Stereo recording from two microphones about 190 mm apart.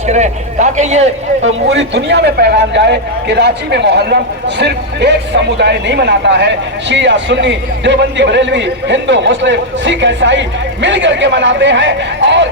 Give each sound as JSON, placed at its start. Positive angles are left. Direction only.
{"t": 0.1, "sound": "a man's voice", "side_deg": -40}
{"t": 1.5, "sound": "a man's voice", "side_deg": -75}